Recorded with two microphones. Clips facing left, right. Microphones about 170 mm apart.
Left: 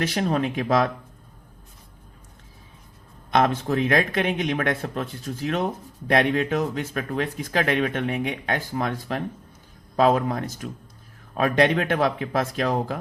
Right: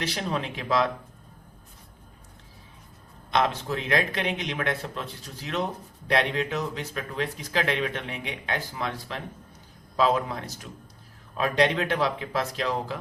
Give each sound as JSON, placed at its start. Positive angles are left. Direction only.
{"t": 0.0, "sound": "speech", "side_deg": 50}
{"t": 3.3, "sound": "speech", "side_deg": 50}